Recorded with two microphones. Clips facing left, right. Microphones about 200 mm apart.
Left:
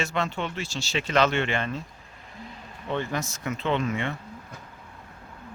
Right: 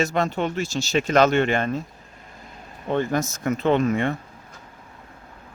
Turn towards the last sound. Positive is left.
turn(degrees=-45)  # may be behind; listen again after turning